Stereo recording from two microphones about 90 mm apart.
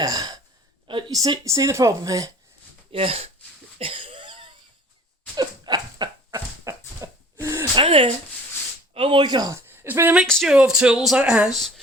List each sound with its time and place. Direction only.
0.0 s gasp: 45° right (ahead or behind)
0.9 s a sound: 65° right (ahead or behind)
1.1 s speech: 40° right (ahead or behind)
2.9 s speech: 90° right
3.8 s cough: 90° right; by 4.5 s 70° right (ahead or behind)
5.4 s a sound: 55° right (ahead or behind)
6.7 s dog: 30° right (ahead or behind)
7.0 s sneeze: 35° right (ahead or behind)
7.4 s gasp: 30° right (ahead or behind)
7.8 s speech: 90° right
8.9 s speech: 70° right (ahead or behind); by 9.5 s 50° right (ahead or behind)
9.5 s speech: 25° right (ahead or behind)
10.2 s speech: 5° left (ahead or behind)
10.5 s speech: 10° right (ahead or behind)